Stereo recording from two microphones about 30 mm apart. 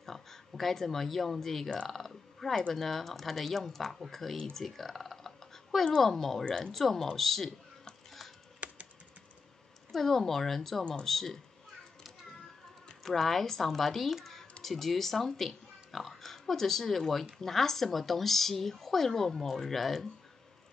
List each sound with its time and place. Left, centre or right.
0.0 s speech: centre
1.9 s a sound: centre
2.7 s speech: centre
5.2 s a sound: centre
6.0 s speech: centre
9.9 s speech: centre
13.0 s speech: centre